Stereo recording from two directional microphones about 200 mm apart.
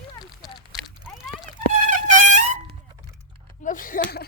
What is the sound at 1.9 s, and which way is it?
Trumpet, 40° right (ahead or behind).